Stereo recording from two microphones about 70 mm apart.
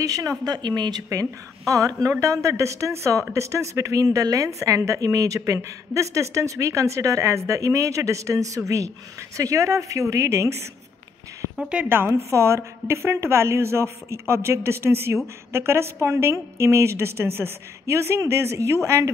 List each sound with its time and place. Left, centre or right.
0.0 s speech: right
0.5 s speech: right
1.7 s speech: right
11.9 s a woman's voice: right